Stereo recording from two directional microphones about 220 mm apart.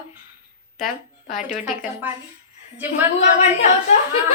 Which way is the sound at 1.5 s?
5° right (ahead or behind).